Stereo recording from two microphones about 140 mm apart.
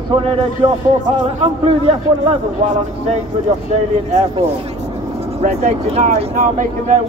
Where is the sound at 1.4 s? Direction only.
45° right (ahead or behind).